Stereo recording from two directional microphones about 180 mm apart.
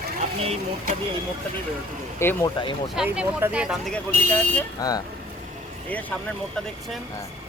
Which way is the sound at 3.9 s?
10° left (ahead or behind).